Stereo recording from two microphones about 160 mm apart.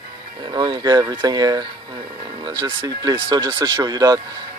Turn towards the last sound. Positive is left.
turn(degrees=-25)  # may be behind; listen again after turning